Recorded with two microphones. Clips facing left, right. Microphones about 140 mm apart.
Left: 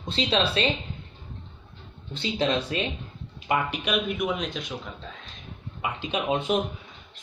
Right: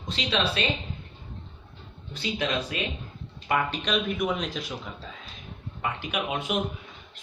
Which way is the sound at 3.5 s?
10° left (ahead or behind).